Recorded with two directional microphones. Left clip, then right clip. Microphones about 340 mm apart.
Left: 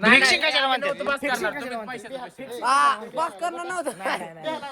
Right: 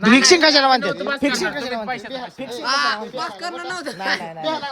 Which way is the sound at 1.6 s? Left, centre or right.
Centre.